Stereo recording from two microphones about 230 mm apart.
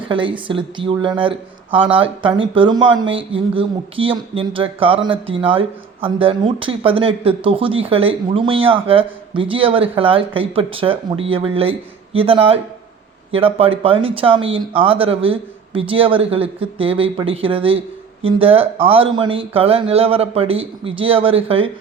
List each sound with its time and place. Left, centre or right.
0.1 s speech: right